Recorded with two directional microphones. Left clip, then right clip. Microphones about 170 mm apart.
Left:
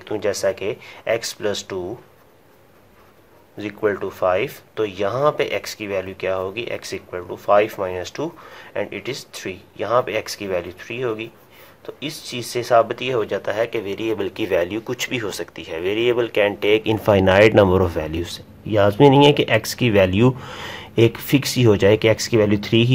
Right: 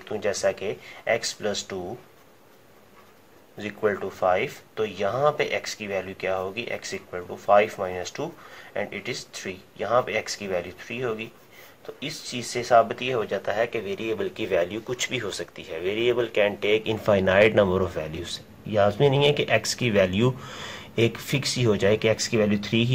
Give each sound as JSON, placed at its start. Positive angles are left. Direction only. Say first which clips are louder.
{"t": 0.0, "sound": "speech", "louder": "left 4 dB", "side_deg": 45}
{"t": 3.5, "sound": "speech", "louder": "left 4 dB", "side_deg": 35}